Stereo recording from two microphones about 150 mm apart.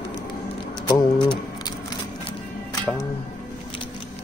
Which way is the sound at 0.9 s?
30° left (ahead or behind).